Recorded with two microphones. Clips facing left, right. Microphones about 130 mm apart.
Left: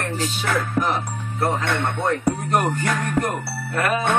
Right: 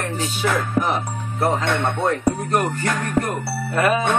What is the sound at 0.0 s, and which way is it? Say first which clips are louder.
Music: right 2 dB; 5° right (ahead or behind).